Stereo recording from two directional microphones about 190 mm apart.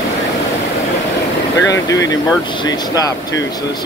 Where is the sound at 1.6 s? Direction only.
15° left (ahead or behind).